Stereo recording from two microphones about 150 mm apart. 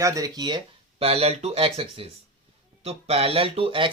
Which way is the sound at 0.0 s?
20° right (ahead or behind).